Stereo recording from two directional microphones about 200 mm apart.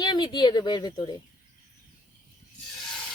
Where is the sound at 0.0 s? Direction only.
20° left (ahead or behind).